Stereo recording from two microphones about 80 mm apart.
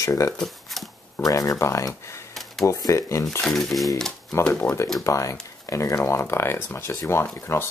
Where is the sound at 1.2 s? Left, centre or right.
Left.